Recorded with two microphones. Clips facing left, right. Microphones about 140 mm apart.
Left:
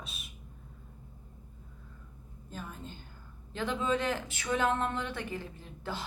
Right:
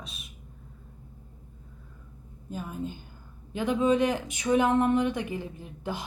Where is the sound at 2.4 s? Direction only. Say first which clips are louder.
Right 9 dB; 15° right (ahead or behind).